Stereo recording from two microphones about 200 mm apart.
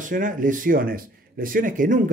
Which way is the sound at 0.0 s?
40° right (ahead or behind).